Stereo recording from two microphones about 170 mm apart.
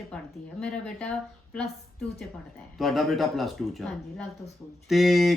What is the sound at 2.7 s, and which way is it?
Speech, centre (ahead or behind).